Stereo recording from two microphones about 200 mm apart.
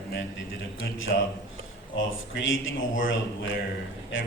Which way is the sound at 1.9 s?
70° left (ahead or behind).